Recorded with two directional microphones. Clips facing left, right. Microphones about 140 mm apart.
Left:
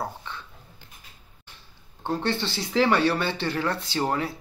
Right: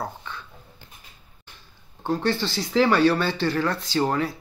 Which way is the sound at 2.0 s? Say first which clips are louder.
Right 3 dB; 25° left (ahead or behind).